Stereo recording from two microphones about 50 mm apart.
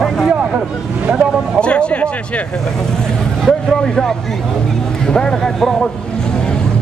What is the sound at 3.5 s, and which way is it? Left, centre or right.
Speech, centre.